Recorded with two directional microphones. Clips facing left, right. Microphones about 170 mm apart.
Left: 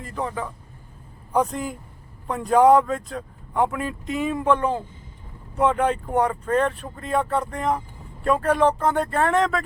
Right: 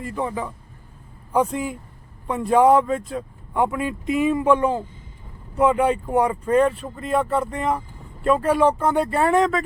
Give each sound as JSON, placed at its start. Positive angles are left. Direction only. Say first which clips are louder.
{"t": 0.0, "sound": "speech", "louder": "right 2 dB", "side_deg": -5}